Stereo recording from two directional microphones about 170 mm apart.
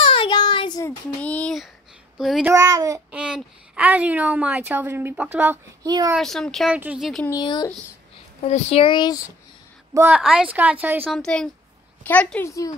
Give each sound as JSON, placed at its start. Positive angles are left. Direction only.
{"t": 0.0, "sound": "child singing", "side_deg": 30}
{"t": 1.2, "sound": "a sound", "side_deg": 5}
{"t": 2.1, "sound": "speech", "side_deg": -5}
{"t": 2.5, "sound": "a child's voice", "side_deg": -20}
{"t": 3.1, "sound": "a woman's voice", "side_deg": -5}
{"t": 5.9, "sound": "a child's voice", "side_deg": -25}
{"t": 6.1, "sound": "speech", "side_deg": 0}
{"t": 7.2, "sound": "speech", "side_deg": 25}
{"t": 8.4, "sound": "speech", "side_deg": 40}
{"t": 9.9, "sound": "a woman's voice", "side_deg": -10}
{"t": 11.1, "sound": "a woman's voice", "side_deg": 5}
{"t": 12.4, "sound": "speech", "side_deg": 20}